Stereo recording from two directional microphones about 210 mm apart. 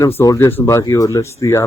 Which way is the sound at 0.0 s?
15° left (ahead or behind).